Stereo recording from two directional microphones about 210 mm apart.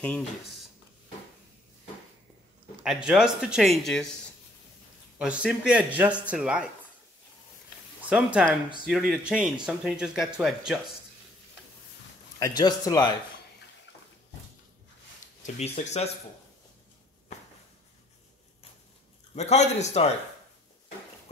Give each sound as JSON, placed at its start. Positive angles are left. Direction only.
{"t": 0.0, "sound": "speech", "side_deg": 5}
{"t": 2.8, "sound": "speech", "side_deg": 0}
{"t": 5.2, "sound": "speech", "side_deg": -5}
{"t": 8.1, "sound": "speech", "side_deg": -5}
{"t": 12.4, "sound": "speech", "side_deg": 15}
{"t": 13.9, "sound": "bathtub", "side_deg": 60}
{"t": 15.4, "sound": "a man's voice", "side_deg": 30}
{"t": 19.3, "sound": "a man's voice", "side_deg": 30}